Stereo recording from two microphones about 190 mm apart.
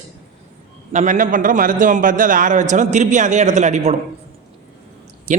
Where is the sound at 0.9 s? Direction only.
40° right (ahead or behind).